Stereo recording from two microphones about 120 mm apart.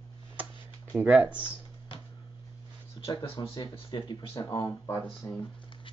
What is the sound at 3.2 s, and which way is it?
Speech, 45° left (ahead or behind).